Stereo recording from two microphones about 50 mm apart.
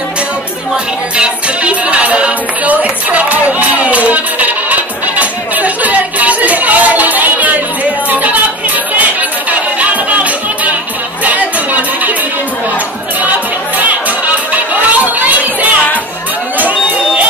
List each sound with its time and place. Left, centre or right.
1.1 s music: right
13.7 s music: right
16.5 s a sound: right